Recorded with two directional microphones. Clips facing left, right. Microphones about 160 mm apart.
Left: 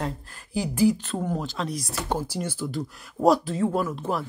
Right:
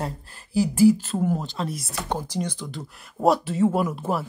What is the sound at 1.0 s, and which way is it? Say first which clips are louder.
Speech: right 3 dB; centre (ahead or behind).